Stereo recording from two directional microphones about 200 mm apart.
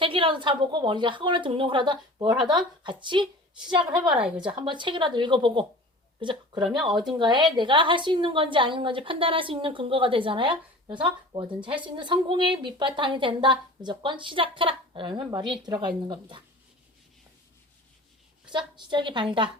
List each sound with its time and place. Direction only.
0.0 s a woman's voice: 25° right (ahead or behind)
3.9 s a woman's voice: 5° right (ahead or behind)
4.5 s a woman's voice: 25° right (ahead or behind)
18.5 s a woman's voice: 25° right (ahead or behind)